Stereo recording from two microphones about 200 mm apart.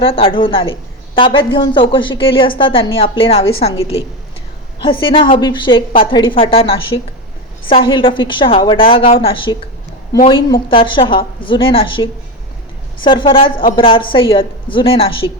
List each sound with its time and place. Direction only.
0.0 s a woman's voice: 25° left (ahead or behind)
13.1 s a woman's voice: 25° left (ahead or behind)